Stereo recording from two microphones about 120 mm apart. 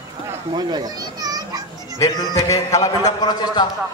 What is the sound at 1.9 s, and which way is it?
A man's voice, 25° left (ahead or behind).